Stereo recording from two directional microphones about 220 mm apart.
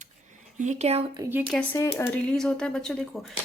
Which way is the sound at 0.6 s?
30° right (ahead or behind).